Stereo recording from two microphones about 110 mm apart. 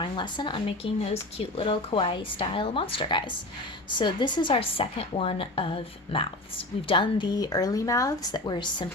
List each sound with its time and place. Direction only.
0.0 s a woman's voice: 45° left (ahead or behind)
1.1 s a woman's voice: 60° left (ahead or behind)